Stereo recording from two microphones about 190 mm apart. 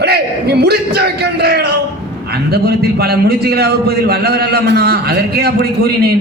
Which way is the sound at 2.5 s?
55° right (ahead or behind).